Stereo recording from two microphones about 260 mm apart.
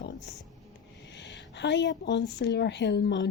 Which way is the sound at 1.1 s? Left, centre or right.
Left.